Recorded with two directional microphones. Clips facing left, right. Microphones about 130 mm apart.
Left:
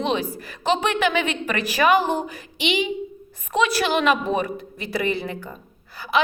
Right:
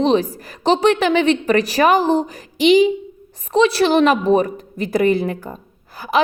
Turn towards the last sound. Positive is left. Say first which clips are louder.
# right 3 dB
turn(degrees=-45)  # may be behind; listen again after turning